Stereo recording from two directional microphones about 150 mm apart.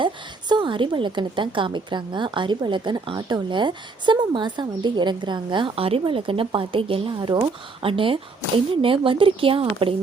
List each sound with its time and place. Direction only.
0.0 s a woman's voice: 30° right (ahead or behind)